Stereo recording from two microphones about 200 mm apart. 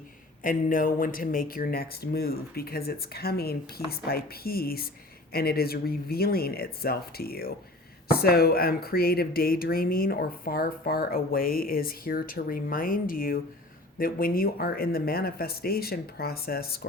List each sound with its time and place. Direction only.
0.4 s speech: 45° left (ahead or behind)